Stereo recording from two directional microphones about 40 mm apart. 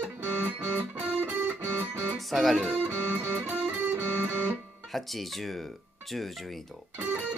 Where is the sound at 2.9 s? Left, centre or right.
Right.